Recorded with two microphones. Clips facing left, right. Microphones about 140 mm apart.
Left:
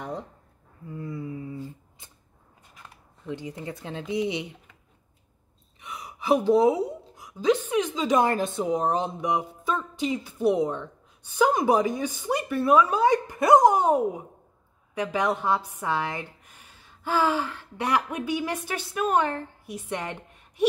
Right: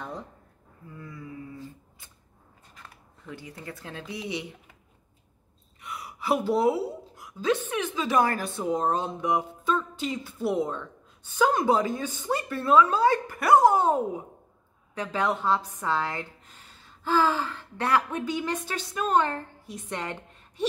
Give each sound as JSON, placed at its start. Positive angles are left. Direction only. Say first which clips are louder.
{"t": 0.8, "sound": "humming", "louder": "left 7 dB", "side_deg": 25}
{"t": 3.3, "sound": "speech", "louder": "left 6 dB", "side_deg": 20}
{"t": 5.8, "sound": "a woman's voice", "louder": "even", "side_deg": 20}